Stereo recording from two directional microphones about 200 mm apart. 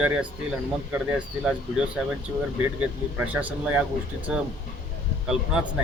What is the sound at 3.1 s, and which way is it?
Speech, 5° right (ahead or behind).